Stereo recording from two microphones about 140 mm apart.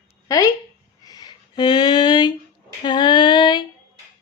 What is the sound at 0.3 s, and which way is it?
Speech, 25° left (ahead or behind).